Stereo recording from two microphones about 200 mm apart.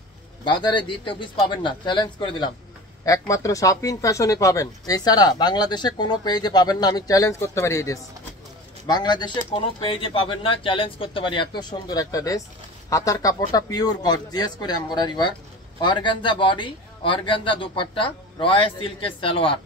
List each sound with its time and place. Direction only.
0.5 s a man's voice: 25° left (ahead or behind)